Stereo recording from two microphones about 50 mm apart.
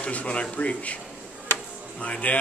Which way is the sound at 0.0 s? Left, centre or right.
Left.